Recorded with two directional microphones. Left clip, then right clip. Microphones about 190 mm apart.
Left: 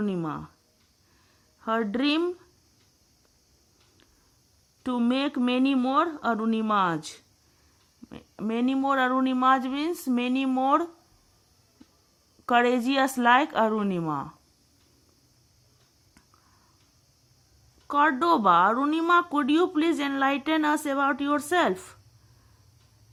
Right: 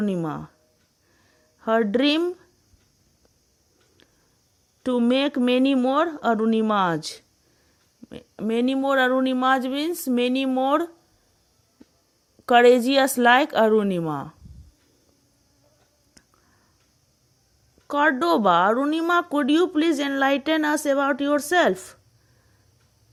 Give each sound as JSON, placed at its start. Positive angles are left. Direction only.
{"t": 0.0, "sound": "speech", "side_deg": -30}
{"t": 1.5, "sound": "speech", "side_deg": -35}
{"t": 4.8, "sound": "speech", "side_deg": -30}
{"t": 12.5, "sound": "speech", "side_deg": -25}
{"t": 17.8, "sound": "speech", "side_deg": -25}